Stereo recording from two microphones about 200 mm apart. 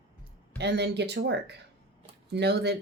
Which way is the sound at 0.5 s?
55° right (ahead or behind).